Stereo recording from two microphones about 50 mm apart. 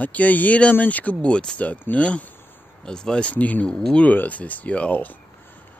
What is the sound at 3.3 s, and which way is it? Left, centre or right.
Speech, left.